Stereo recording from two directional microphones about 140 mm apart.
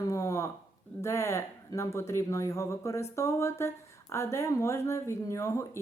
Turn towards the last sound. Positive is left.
turn(degrees=20)  # may be behind; listen again after turning